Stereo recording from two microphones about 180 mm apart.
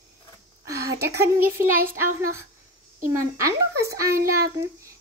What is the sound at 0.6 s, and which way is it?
A child's voice, 15° right (ahead or behind).